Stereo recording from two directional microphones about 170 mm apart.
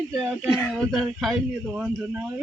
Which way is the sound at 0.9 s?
5° right (ahead or behind).